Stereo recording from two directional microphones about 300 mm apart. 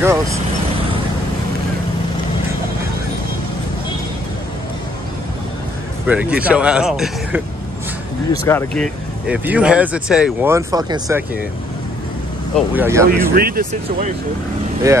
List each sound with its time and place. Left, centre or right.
0.0 s speech: centre
6.0 s speech: centre
12.5 s speech: centre
13.3 s speech: right
14.8 s speech: centre